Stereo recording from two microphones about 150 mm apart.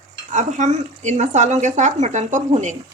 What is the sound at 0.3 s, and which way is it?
Speech, 55° right (ahead or behind).